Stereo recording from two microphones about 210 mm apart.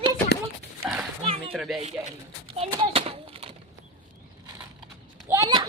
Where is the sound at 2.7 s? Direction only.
25° right (ahead or behind).